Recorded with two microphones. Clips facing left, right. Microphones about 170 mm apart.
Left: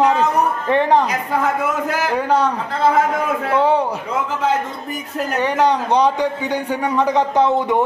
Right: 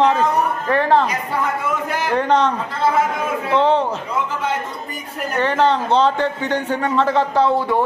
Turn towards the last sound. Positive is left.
turn(degrees=20)  # may be behind; listen again after turning